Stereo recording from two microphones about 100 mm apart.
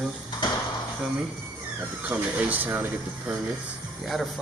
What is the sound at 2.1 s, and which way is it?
Speech, 15° right (ahead or behind).